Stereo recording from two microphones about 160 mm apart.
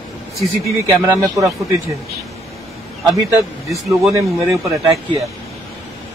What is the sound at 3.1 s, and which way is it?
A man's voice, 20° right (ahead or behind).